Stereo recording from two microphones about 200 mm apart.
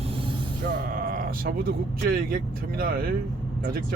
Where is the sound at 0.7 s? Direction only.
45° right (ahead or behind).